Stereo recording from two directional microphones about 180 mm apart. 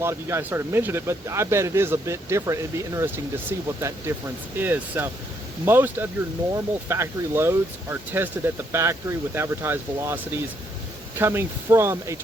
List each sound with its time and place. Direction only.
0.0 s speech: 15° right (ahead or behind)